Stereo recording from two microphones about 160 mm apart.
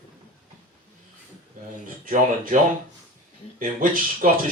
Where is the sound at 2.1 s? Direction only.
55° right (ahead or behind).